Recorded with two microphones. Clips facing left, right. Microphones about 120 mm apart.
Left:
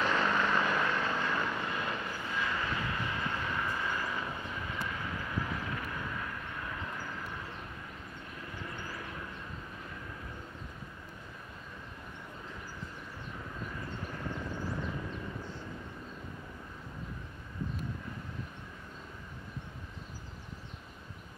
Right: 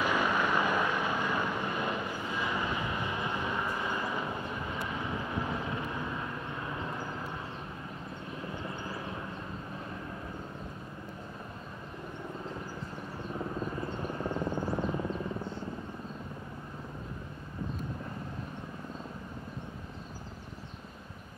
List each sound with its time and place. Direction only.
0.0 s vehicle: 10° right (ahead or behind)
8.6 s vehicle: 25° right (ahead or behind)
13.6 s helicopter: 30° right (ahead or behind)